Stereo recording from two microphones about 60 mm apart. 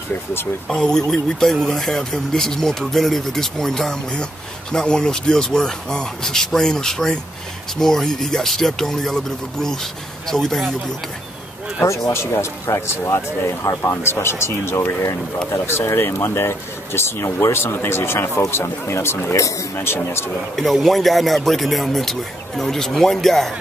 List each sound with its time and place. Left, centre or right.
0.1 s speech: left
0.7 s speech: centre
12.1 s speech: left
14.0 s speech: left
19.3 s speech: left
19.8 s speech: left
20.5 s speech: centre